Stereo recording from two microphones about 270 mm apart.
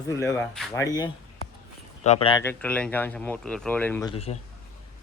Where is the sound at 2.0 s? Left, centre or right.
Left; by 4.1 s centre.